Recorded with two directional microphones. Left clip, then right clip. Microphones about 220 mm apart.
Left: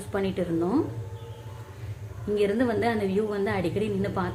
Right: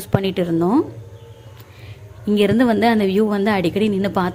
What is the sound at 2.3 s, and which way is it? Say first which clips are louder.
A woman's voice: right 8 dB; 45° right (ahead or behind).